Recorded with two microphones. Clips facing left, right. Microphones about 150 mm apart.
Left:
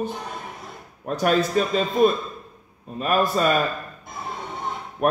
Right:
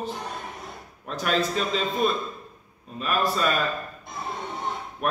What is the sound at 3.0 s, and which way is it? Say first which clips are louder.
Speech: left 4 dB; 50° left (ahead or behind).